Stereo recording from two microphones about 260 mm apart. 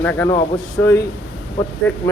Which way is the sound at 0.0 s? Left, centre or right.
Centre.